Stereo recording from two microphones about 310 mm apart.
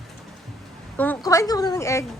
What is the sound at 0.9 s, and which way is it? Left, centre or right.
Speech, centre.